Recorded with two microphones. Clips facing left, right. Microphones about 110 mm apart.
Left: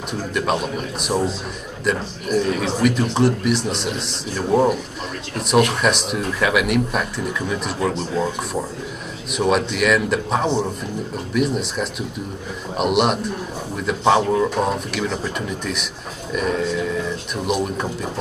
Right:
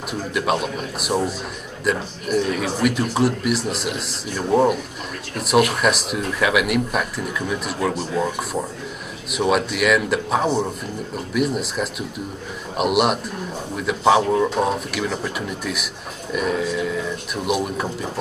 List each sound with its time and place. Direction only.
0.3 s a man's voice: centre (ahead or behind)
9.3 s a man's voice: centre (ahead or behind)